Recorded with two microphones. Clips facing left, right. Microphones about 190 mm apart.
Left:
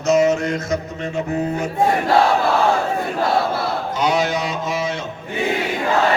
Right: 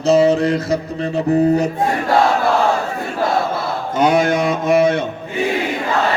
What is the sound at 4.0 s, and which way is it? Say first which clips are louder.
A man's voice: right 6 dB; 50° right (ahead or behind).